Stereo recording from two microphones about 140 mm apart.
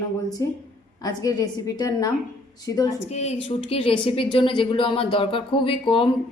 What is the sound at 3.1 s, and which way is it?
Speech, 50° left (ahead or behind).